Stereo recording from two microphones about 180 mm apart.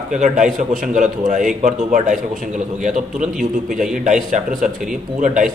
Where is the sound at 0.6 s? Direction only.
45° right (ahead or behind).